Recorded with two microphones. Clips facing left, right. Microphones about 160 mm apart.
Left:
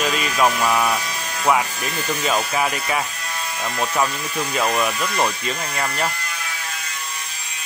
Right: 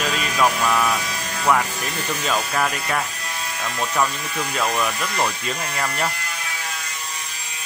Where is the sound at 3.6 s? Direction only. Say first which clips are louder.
Left 1 dB; 20° left (ahead or behind).